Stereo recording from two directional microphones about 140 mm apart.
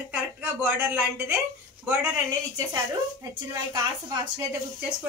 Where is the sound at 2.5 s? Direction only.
25° right (ahead or behind).